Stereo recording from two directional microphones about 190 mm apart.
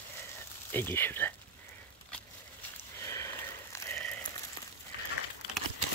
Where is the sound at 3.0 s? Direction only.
15° left (ahead or behind).